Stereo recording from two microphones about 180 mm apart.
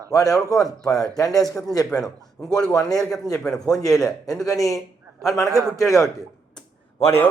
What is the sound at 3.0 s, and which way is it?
Speech, centre (ahead or behind).